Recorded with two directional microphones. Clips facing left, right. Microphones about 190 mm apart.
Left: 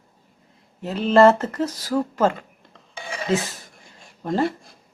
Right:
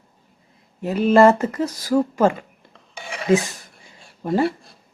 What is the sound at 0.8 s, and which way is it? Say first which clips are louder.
Speech: right 1 dB; 10° right (ahead or behind).